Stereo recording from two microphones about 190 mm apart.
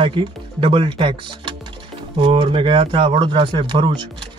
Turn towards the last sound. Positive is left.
turn(degrees=-25)  # may be behind; listen again after turning